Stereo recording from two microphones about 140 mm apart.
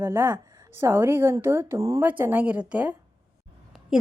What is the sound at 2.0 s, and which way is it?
A woman's voice, 10° right (ahead or behind).